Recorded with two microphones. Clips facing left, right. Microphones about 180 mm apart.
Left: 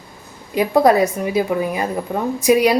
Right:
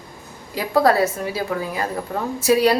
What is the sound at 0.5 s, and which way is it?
A woman's voice, 20° left (ahead or behind).